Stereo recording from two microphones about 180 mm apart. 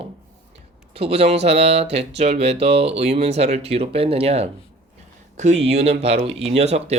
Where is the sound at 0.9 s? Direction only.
35° right (ahead or behind).